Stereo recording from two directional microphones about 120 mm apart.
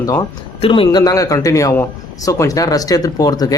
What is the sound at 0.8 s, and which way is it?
A man's voice, 30° left (ahead or behind).